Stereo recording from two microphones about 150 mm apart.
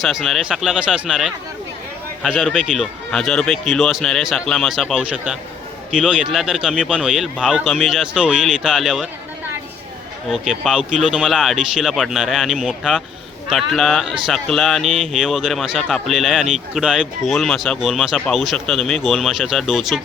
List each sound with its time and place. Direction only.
0.0 s speech: centre (ahead or behind)
10.2 s speech: centre (ahead or behind)